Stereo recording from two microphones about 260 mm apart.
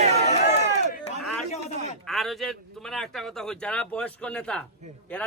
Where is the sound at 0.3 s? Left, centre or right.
Left.